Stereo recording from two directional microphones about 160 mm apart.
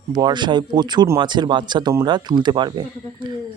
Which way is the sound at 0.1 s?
25° right (ahead or behind).